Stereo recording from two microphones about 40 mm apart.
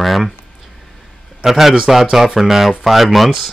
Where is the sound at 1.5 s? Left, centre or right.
Centre.